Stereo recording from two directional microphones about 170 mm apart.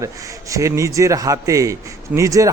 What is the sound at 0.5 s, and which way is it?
A man's voice, 20° right (ahead or behind).